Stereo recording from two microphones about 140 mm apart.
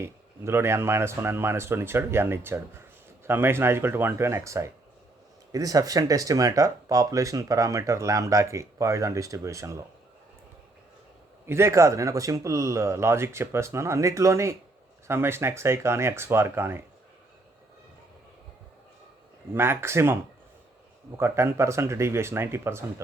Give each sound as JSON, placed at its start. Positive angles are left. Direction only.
{"t": 0.0, "sound": "speech", "side_deg": -20}
{"t": 11.4, "sound": "speech", "side_deg": -20}
{"t": 19.5, "sound": "speech", "side_deg": -15}
{"t": 21.2, "sound": "speech", "side_deg": -20}